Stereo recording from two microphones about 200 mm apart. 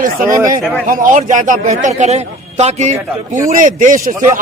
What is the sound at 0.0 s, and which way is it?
A man's voice, 45° right (ahead or behind).